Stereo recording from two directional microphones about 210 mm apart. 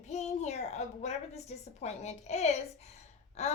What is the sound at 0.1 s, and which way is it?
A child's voice, 35° left (ahead or behind).